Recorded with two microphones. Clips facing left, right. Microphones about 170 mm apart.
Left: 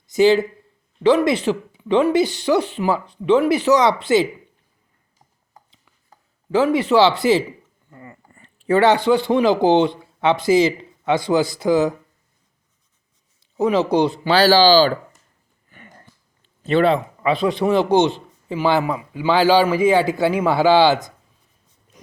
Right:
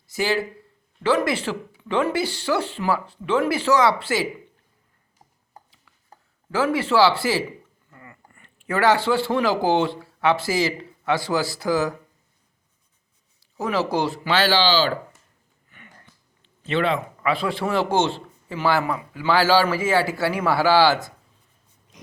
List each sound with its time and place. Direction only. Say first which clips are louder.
0.1 s a man's voice: left 9 dB; 20° left (ahead or behind)
6.5 s a man's voice: left 5 dB; 20° left (ahead or behind)
13.6 s a man's voice: left 6 dB; 20° left (ahead or behind)
14.3 s speech: left 7 dB; 35° left (ahead or behind)
16.4 s a sound: left 6 dB; 40° left (ahead or behind)
17.2 s a man's voice: left 6 dB; 20° left (ahead or behind)